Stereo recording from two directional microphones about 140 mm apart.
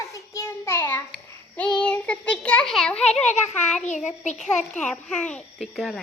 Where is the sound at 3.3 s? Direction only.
55° left (ahead or behind).